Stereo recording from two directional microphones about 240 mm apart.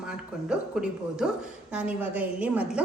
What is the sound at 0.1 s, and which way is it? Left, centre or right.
A woman's voice, centre.